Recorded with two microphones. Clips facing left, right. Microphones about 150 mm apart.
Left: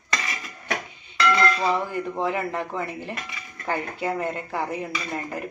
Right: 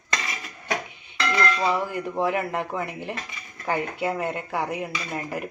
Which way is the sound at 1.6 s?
10° right (ahead or behind).